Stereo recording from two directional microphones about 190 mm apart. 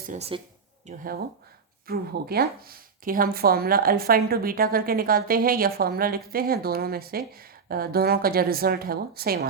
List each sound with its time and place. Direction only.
0.1 s speech: 30° right (ahead or behind)
0.9 s speech: 50° right (ahead or behind)